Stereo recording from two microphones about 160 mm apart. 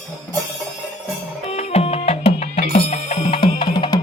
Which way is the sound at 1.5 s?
40° left (ahead or behind).